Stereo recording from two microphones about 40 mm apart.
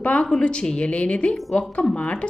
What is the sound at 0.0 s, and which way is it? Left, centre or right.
Speech, left.